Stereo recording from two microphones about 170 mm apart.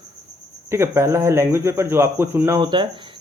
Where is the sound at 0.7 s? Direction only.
15° right (ahead or behind).